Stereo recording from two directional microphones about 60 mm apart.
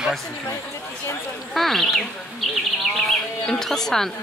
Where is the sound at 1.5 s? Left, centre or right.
Centre.